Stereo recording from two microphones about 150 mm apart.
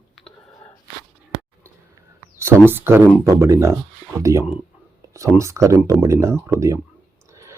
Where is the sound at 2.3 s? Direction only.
15° right (ahead or behind).